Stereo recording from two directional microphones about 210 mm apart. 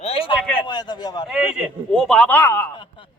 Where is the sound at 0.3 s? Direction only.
5° left (ahead or behind).